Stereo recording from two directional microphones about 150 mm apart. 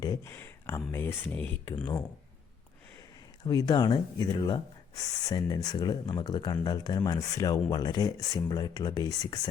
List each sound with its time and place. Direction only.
0.0 s speech: 20° left (ahead or behind)
3.4 s speech: 30° left (ahead or behind)